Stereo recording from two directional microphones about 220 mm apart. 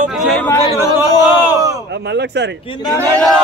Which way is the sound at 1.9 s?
50° right (ahead or behind).